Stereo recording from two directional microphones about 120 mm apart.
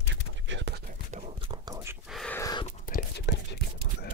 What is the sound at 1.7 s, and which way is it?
Whispering, 25° right (ahead or behind).